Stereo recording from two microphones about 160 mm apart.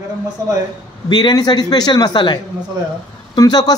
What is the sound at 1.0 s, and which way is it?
Speech, 25° left (ahead or behind).